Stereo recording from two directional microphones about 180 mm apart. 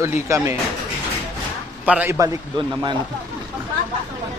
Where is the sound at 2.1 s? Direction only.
20° right (ahead or behind).